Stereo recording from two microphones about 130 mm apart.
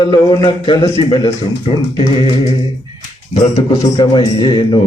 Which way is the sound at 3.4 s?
40° left (ahead or behind).